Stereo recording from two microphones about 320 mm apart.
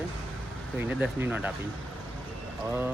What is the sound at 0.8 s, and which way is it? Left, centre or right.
Speech, centre.